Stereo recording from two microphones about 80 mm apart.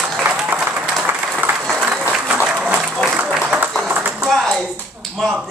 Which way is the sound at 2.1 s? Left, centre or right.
Centre.